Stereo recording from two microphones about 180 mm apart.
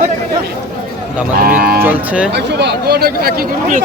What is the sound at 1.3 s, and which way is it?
Speech, 55° right (ahead or behind).